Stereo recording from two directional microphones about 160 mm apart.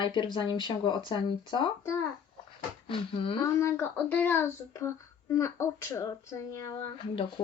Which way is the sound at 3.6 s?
15° left (ahead or behind).